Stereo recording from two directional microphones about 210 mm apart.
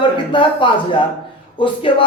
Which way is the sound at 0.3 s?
25° left (ahead or behind).